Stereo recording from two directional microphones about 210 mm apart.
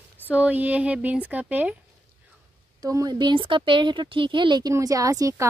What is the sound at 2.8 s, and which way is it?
Speech, 15° right (ahead or behind).